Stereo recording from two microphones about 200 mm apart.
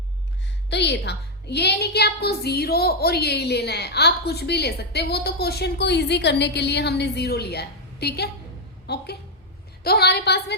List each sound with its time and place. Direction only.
0.7 s a woman's voice: 60° left (ahead or behind)